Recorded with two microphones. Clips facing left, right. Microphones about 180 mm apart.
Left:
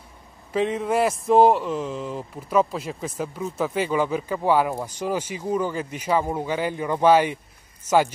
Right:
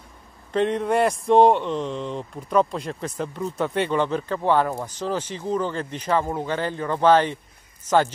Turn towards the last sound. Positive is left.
turn(degrees=10)  # may be behind; listen again after turning